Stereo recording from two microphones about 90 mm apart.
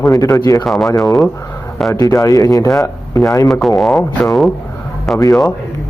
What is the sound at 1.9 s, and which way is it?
Speech, 40° left (ahead or behind).